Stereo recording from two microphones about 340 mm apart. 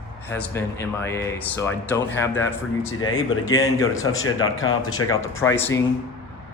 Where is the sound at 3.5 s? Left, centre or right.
Centre.